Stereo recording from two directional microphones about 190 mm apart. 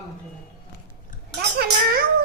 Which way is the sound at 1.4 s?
55° right (ahead or behind).